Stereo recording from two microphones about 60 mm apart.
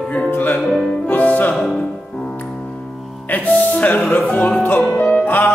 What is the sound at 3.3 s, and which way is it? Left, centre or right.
Music, left.